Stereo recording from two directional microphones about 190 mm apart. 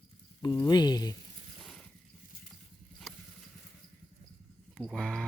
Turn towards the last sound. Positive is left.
turn(degrees=5)  # may be behind; listen again after turning